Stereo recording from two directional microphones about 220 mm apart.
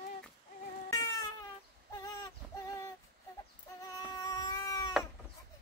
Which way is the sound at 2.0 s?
15° left (ahead or behind).